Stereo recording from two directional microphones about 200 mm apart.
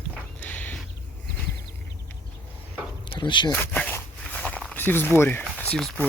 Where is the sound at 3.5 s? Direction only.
10° left (ahead or behind).